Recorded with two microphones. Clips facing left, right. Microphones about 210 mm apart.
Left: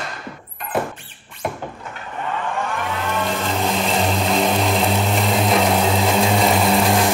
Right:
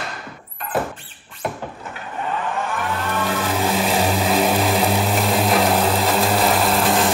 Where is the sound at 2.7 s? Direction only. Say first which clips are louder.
Even; 5° right (ahead or behind).